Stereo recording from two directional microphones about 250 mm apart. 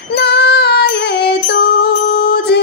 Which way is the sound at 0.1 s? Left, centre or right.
Left.